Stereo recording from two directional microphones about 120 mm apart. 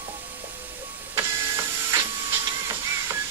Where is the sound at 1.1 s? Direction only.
25° right (ahead or behind).